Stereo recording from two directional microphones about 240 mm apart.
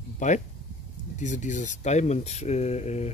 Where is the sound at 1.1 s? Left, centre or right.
Left.